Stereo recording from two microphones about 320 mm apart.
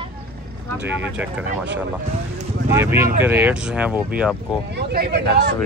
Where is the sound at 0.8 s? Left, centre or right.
Centre.